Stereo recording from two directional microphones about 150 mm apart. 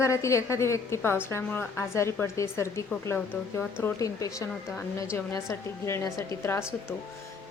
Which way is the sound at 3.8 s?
20° left (ahead or behind).